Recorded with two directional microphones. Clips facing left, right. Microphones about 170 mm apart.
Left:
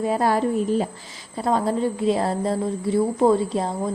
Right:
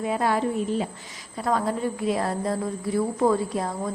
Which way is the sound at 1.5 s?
30° left (ahead or behind).